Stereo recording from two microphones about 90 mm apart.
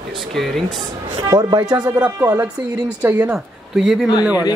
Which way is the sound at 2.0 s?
20° right (ahead or behind).